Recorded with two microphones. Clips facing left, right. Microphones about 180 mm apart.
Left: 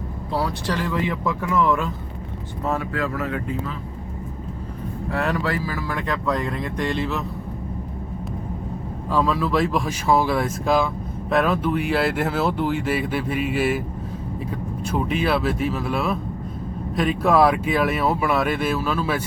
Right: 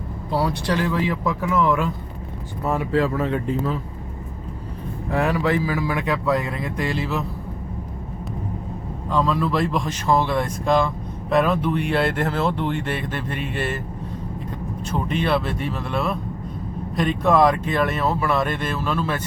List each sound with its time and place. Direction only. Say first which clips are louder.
0.3 s speech: right 2 dB; centre (ahead or behind)
2.9 s speech: right 5 dB; 25° right (ahead or behind)
5.1 s speech: right 4 dB; 15° right (ahead or behind)
9.0 s speech: even; 5° left (ahead or behind)
14.8 s speech: even; 5° left (ahead or behind)